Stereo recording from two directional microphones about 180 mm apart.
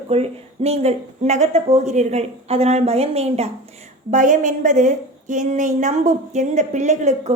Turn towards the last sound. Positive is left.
turn(degrees=-40)  # may be behind; listen again after turning